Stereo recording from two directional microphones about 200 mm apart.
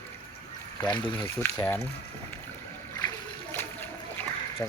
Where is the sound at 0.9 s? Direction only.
10° left (ahead or behind).